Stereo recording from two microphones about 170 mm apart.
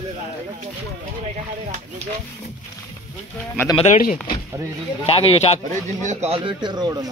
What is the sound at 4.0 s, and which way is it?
Speech, 55° left (ahead or behind).